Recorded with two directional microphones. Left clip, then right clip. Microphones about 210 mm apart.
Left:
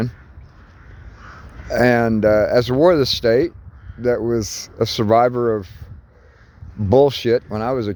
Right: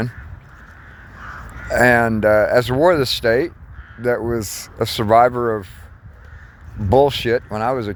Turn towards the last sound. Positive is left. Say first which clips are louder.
# right 1 dB
turn(degrees=55)  # may be behind; listen again after turning